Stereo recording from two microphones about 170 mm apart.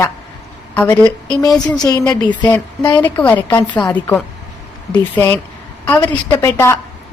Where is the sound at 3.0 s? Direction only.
10° left (ahead or behind).